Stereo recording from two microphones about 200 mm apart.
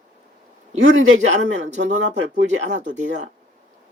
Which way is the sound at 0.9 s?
70° right (ahead or behind).